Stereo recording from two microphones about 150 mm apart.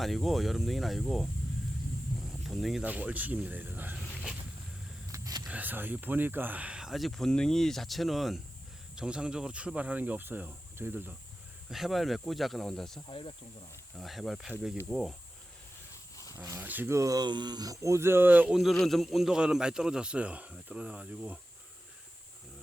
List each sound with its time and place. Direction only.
0.0 s speech: centre (ahead or behind)
2.5 s speech: centre (ahead or behind)
2.8 s speech: 10° right (ahead or behind)
3.9 s a sound: 5° right (ahead or behind)
5.1 s a sound: 25° right (ahead or behind)
5.5 s speech: 10° right (ahead or behind)
11.7 s speech: centre (ahead or behind)
13.1 s speech: 35° left (ahead or behind)
13.9 s speech: centre (ahead or behind)
16.1 s a sound: 20° left (ahead or behind)
16.4 s speech: 15° right (ahead or behind)